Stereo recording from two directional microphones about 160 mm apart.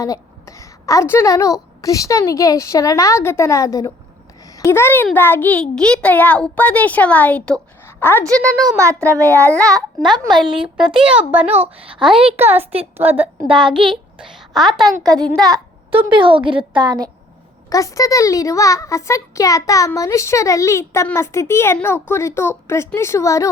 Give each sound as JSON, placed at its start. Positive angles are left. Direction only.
{"t": 0.0, "sound": "a woman's voice", "side_deg": 20}
{"t": 8.6, "sound": "a child's voice", "side_deg": -20}
{"t": 9.4, "sound": "a child's voice", "side_deg": 10}
{"t": 10.4, "sound": "a woman's voice", "side_deg": -30}
{"t": 11.0, "sound": "a child's voice", "side_deg": -10}
{"t": 13.7, "sound": "a woman's voice", "side_deg": -30}
{"t": 14.2, "sound": "a sound", "side_deg": -5}
{"t": 15.1, "sound": "a child's voice", "side_deg": -25}
{"t": 17.7, "sound": "a child's voice", "side_deg": 20}